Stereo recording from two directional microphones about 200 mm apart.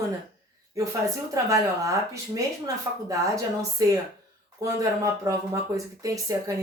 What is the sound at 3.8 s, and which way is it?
Speech, 15° right (ahead or behind).